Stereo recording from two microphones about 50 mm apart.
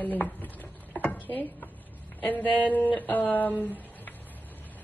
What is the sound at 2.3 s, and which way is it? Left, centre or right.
Music, left.